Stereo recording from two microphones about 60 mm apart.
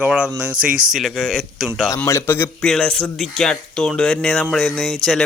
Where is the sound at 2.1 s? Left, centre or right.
Left.